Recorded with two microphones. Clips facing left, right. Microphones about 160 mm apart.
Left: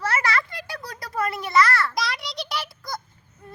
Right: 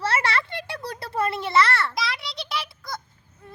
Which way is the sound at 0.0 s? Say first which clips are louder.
Even; 30° right (ahead or behind).